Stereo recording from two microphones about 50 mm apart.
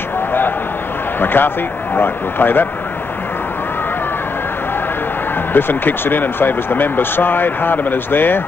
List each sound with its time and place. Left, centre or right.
1.2 s speech: left
5.5 s speech: left